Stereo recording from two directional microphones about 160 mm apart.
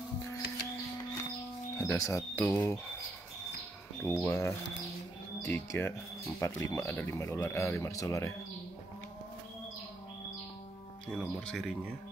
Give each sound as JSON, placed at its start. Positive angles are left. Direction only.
{"t": 1.8, "sound": "speech", "side_deg": 20}
{"t": 4.0, "sound": "speech", "side_deg": 15}
{"t": 11.1, "sound": "speech", "side_deg": 0}